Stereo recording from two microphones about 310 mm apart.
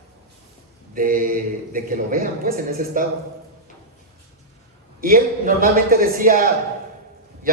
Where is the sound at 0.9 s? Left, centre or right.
Right.